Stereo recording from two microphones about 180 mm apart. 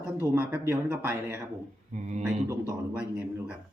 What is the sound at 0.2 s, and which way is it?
Speech, 10° right (ahead or behind).